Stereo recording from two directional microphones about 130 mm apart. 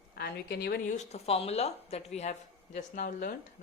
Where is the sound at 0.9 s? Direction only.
60° left (ahead or behind).